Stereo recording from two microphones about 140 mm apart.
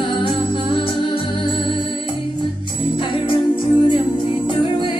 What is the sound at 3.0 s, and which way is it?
Music, 35° left (ahead or behind).